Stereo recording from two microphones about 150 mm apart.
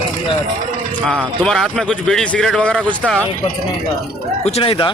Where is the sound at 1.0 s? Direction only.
5° left (ahead or behind).